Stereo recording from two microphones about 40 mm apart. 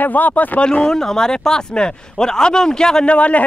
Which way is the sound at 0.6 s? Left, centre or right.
Left.